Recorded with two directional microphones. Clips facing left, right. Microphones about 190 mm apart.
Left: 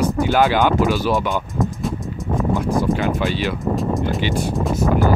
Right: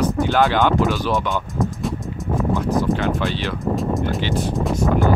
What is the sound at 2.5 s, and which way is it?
Speech, 15° left (ahead or behind).